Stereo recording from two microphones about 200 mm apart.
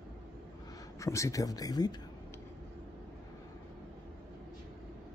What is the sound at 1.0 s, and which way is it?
Speech, 15° left (ahead or behind).